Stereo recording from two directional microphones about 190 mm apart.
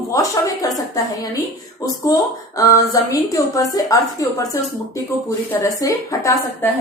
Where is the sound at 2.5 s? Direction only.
15° left (ahead or behind).